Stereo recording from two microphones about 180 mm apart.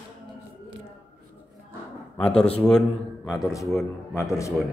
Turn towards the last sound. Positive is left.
turn(degrees=15)  # may be behind; listen again after turning